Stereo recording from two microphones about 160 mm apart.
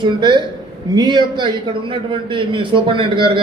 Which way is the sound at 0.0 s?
30° right (ahead or behind).